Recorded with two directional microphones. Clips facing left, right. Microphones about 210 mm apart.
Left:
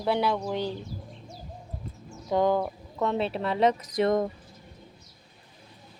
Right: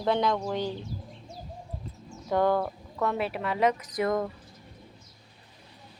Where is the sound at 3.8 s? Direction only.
40° left (ahead or behind).